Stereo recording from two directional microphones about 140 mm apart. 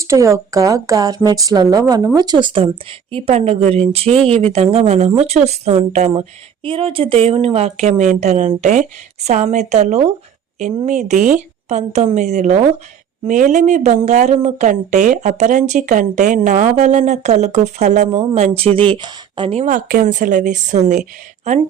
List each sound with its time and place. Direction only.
0.0 s a woman's voice: 20° right (ahead or behind)
3.1 s speech: 45° right (ahead or behind)
19.5 s speech: 70° right (ahead or behind); by 21.6 s 55° right (ahead or behind)